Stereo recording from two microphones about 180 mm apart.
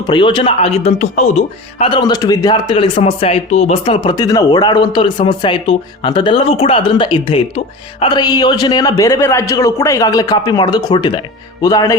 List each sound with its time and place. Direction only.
0.1 s speech: 25° left (ahead or behind)